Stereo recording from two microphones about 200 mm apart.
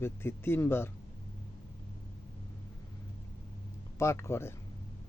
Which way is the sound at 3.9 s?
15° left (ahead or behind).